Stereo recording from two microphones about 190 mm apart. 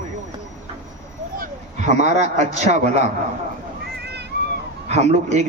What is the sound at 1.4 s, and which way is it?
A man's voice, 40° right (ahead or behind).